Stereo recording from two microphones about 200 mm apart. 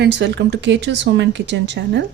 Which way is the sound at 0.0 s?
60° right (ahead or behind).